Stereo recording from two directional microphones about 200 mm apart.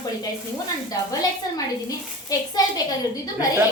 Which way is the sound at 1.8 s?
20° left (ahead or behind).